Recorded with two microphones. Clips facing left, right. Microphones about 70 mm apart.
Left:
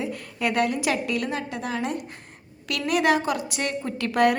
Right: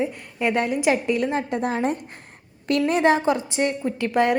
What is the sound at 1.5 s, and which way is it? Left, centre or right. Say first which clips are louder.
A woman's voice: right 5 dB; right.